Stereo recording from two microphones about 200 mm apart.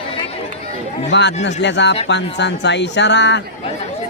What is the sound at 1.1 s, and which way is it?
A man's voice, 60° left (ahead or behind).